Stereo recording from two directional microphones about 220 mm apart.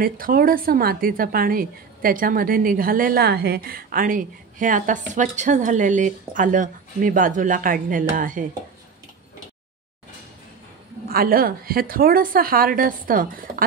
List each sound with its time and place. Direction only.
0.0 s a woman's voice: 40° right (ahead or behind)
11.1 s a woman's voice: 40° right (ahead or behind)